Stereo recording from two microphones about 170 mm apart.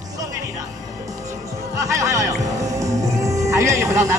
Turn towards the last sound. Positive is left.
turn(degrees=-15)  # may be behind; listen again after turning